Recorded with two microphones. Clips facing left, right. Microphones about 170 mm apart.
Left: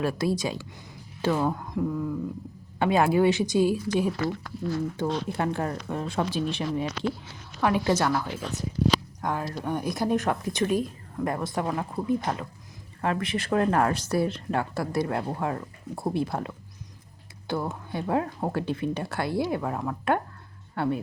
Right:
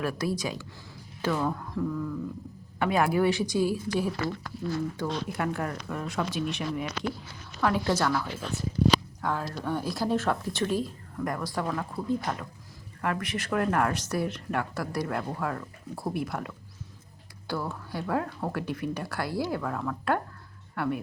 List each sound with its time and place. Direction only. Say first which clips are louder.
0.0 s speech: left 3 dB; 25° left (ahead or behind)
7.6 s speech: left 2 dB; 15° left (ahead or behind)
17.5 s speech: left 3 dB; 20° left (ahead or behind)